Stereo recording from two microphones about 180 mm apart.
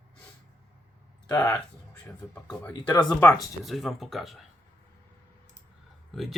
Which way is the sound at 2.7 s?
25° left (ahead or behind).